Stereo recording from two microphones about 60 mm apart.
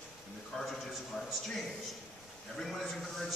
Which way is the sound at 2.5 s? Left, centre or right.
Centre.